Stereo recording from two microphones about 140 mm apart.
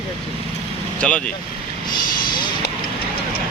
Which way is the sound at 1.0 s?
10° left (ahead or behind).